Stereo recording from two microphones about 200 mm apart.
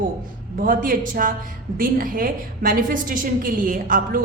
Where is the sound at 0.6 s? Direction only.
45° right (ahead or behind).